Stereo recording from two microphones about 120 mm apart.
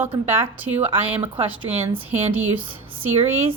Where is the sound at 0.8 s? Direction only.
50° right (ahead or behind).